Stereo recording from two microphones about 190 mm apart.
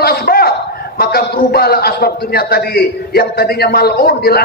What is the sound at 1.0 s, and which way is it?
A man's voice, 55° left (ahead or behind).